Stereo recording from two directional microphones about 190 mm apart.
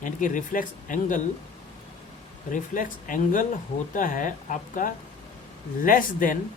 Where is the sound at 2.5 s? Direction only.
45° left (ahead or behind).